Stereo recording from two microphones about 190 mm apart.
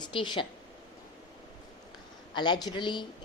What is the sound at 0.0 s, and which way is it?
Speech, 25° left (ahead or behind).